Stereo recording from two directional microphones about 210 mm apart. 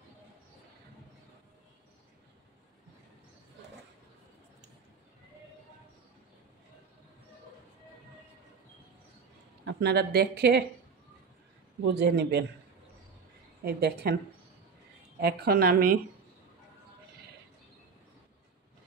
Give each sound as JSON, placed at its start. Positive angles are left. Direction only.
{"t": 9.7, "sound": "speech", "side_deg": -50}
{"t": 11.8, "sound": "speech", "side_deg": -55}
{"t": 13.7, "sound": "speech", "side_deg": -50}
{"t": 15.1, "sound": "speech", "side_deg": -50}